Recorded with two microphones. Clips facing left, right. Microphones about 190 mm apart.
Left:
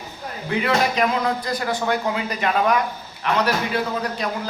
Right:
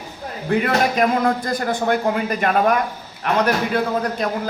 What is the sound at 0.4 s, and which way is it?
A man's voice, 50° right (ahead or behind).